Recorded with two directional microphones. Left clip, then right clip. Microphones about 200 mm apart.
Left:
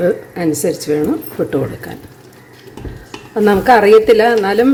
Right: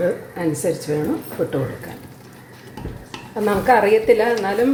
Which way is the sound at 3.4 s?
65° left (ahead or behind).